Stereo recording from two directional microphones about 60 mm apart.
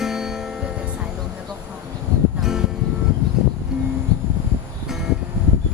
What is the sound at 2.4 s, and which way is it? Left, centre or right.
Music, centre.